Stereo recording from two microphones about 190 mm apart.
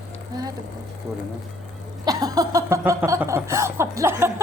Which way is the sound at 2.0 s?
20° right (ahead or behind).